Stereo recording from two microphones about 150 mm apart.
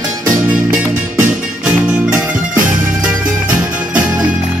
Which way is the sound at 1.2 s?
10° right (ahead or behind).